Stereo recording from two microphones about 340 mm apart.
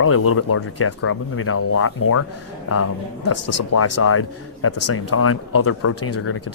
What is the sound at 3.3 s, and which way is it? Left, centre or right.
Speech, left.